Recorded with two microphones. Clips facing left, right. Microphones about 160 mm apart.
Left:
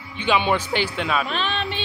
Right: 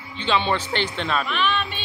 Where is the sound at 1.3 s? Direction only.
35° left (ahead or behind).